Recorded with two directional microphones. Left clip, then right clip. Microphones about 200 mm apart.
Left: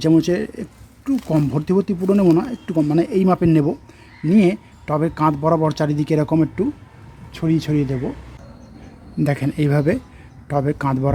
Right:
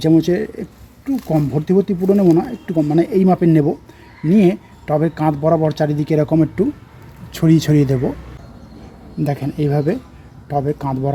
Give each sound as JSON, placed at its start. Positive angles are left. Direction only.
{"t": 0.0, "sound": "speech", "side_deg": 15}
{"t": 7.3, "sound": "speech", "side_deg": -10}
{"t": 9.2, "sound": "speech", "side_deg": 15}